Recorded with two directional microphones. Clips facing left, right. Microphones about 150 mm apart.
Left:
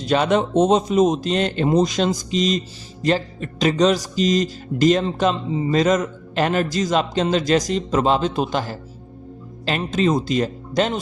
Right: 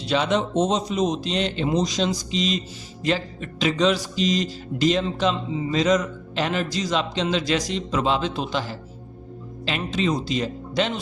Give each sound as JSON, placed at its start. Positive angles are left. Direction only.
{"t": 0.0, "sound": "a man's voice", "side_deg": 50}